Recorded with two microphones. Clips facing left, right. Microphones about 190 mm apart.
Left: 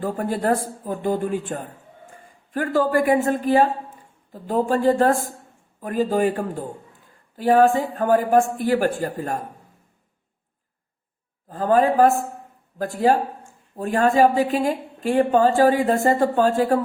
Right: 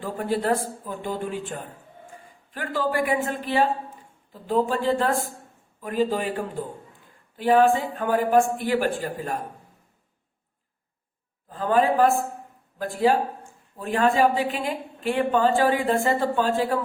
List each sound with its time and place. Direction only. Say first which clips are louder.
0.0 s a woman's voice: left 2 dB; 45° left (ahead or behind)
11.4 s a woman's voice: left 3 dB; 45° left (ahead or behind)